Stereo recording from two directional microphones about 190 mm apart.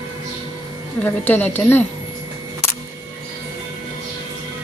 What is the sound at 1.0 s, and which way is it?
Speech, 10° left (ahead or behind).